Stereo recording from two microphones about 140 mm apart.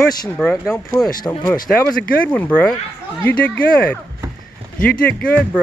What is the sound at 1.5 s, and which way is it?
Speech, 10° left (ahead or behind).